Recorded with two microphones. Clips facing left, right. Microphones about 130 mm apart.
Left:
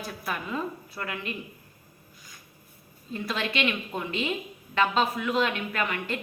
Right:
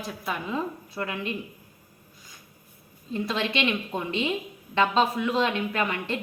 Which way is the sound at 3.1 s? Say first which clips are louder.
Right 2 dB; 25° right (ahead or behind).